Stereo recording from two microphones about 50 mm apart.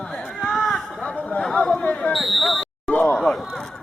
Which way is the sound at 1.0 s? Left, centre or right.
Left.